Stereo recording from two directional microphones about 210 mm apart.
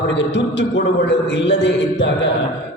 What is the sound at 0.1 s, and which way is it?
A man's voice, 60° left (ahead or behind).